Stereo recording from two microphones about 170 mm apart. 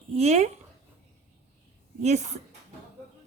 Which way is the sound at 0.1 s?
40° right (ahead or behind).